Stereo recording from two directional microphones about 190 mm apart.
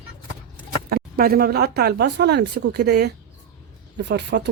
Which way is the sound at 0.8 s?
55° right (ahead or behind).